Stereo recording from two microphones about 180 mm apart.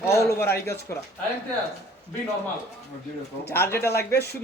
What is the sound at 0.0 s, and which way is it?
Speech, 15° left (ahead or behind).